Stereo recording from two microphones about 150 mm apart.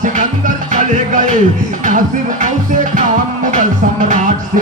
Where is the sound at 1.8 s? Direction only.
60° right (ahead or behind).